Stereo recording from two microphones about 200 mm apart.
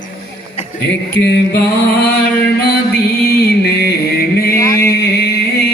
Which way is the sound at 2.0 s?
50° left (ahead or behind).